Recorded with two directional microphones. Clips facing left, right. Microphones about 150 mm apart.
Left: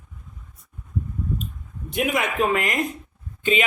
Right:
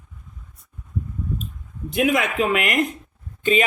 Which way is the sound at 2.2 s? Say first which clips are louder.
Right 1 dB; 80° right.